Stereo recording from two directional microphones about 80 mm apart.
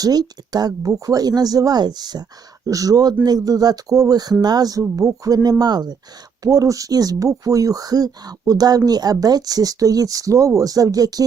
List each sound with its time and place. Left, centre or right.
0.0 s speech: right
2.6 s speech: right
6.4 s speech: right